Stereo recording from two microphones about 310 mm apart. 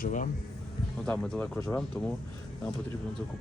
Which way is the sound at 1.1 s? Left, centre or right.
Centre.